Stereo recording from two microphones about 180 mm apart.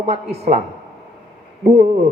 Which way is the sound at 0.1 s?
35° right (ahead or behind).